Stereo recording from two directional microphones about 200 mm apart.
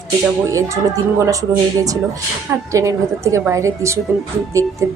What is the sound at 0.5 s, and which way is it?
Speech, 15° right (ahead or behind).